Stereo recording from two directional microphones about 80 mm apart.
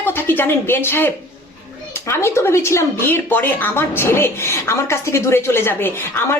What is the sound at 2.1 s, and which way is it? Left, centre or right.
Speech, left.